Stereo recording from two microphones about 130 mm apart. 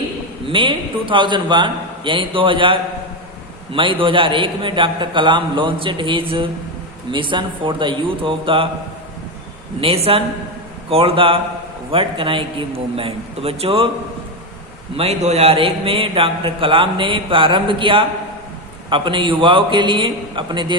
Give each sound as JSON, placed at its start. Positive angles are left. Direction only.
{"t": 0.4, "sound": "a man's voice", "side_deg": -40}
{"t": 9.8, "sound": "a man's voice", "side_deg": -50}
{"t": 14.9, "sound": "a man's voice", "side_deg": -55}